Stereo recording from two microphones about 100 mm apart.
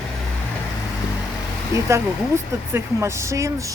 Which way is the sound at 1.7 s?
30° right (ahead or behind).